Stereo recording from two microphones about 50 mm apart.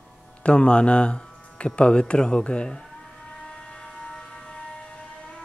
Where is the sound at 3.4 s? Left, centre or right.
Centre.